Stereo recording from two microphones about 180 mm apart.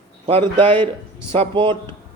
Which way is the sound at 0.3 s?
30° right (ahead or behind).